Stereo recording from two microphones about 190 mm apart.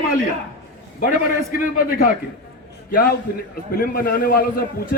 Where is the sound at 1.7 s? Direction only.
50° left (ahead or behind).